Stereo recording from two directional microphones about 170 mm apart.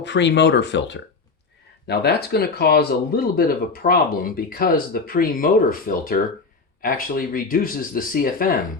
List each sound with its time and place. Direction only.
0.0 s speech: 90° left
1.9 s speech: 70° left (ahead or behind)